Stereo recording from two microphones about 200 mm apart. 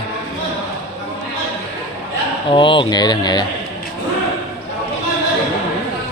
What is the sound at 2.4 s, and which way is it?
Speech, 25° left (ahead or behind).